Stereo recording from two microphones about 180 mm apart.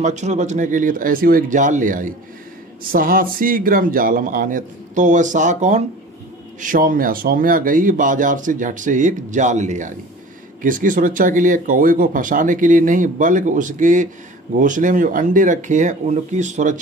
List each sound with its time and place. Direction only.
0.0 s speech: 40° right (ahead or behind)